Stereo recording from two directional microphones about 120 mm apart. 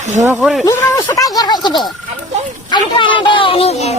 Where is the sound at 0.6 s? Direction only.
30° left (ahead or behind).